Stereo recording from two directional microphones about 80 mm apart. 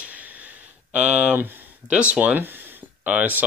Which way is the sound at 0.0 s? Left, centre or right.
Centre.